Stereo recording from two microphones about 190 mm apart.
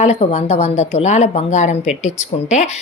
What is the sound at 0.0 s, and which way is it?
Speech, 35° left (ahead or behind).